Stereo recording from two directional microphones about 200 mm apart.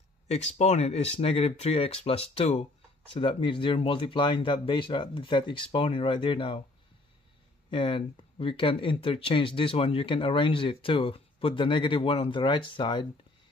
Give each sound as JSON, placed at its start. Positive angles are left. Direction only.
{"t": 0.3, "sound": "speech", "side_deg": 30}
{"t": 7.7, "sound": "speech", "side_deg": 25}